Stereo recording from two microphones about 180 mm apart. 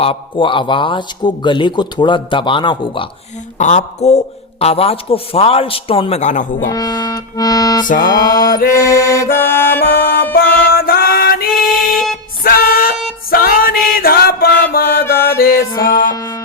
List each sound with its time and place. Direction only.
0.0 s speech: 30° left (ahead or behind)
3.6 s speech: 40° left (ahead or behind)
6.7 s speech: 20° left (ahead or behind)
7.9 s music: 50° left (ahead or behind)
8.8 s music: 15° left (ahead or behind)
9.8 s music: 55° left (ahead or behind)
15.0 s music: 15° left (ahead or behind)
15.4 s music: 55° left (ahead or behind)
16.1 s music: 20° left (ahead or behind)